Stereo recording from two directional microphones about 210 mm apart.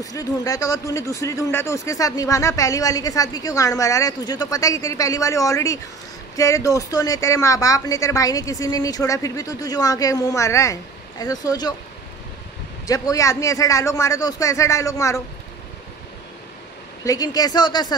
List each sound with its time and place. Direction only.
0.0 s speech: 15° left (ahead or behind)
12.8 s speech: 15° left (ahead or behind)
17.0 s speech: 15° left (ahead or behind)